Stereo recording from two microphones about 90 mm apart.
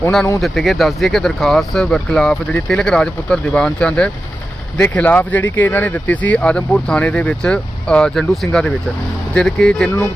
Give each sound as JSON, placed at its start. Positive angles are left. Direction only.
{"t": 0.4, "sound": "speech", "side_deg": 0}